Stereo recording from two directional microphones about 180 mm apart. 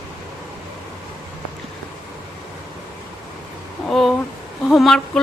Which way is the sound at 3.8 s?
Centre (ahead or behind).